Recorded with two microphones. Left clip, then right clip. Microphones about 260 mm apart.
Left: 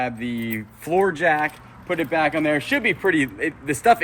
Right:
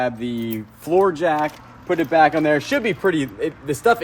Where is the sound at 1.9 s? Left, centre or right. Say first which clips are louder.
Right 5 dB; centre.